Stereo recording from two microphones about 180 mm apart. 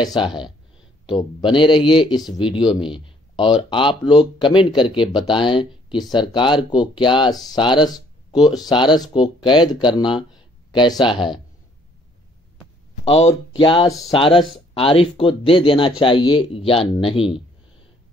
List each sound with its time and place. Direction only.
0.0 s speech: 25° left (ahead or behind)
13.0 s speech: 35° left (ahead or behind)